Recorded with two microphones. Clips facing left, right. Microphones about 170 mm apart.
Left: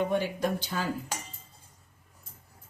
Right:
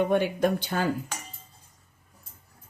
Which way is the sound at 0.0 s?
60° right (ahead or behind).